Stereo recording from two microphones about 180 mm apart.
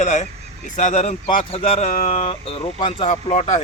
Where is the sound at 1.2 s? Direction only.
30° left (ahead or behind).